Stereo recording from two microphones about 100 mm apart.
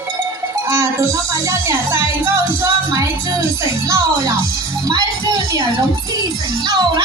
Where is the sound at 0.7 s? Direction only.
30° right (ahead or behind).